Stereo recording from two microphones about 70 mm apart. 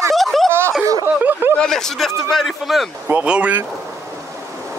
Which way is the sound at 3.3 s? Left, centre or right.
Centre.